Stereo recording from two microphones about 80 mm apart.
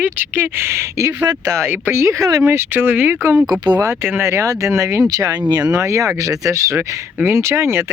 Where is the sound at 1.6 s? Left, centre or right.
Right.